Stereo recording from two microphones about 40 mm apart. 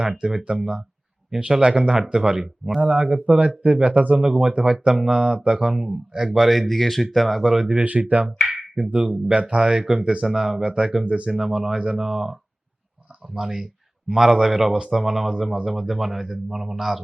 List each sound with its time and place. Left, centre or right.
0.0 s speech: centre
1.6 s speech: right
2.9 s speech: right
4.2 s speech: centre
5.7 s speech: centre
6.4 s speech: centre
7.7 s speech: right
8.4 s a sound: centre
8.7 s speech: right
10.2 s speech: centre
10.6 s speech: right
11.3 s speech: centre